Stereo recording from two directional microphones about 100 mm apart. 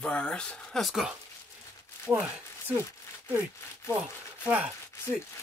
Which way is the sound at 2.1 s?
20° right (ahead or behind).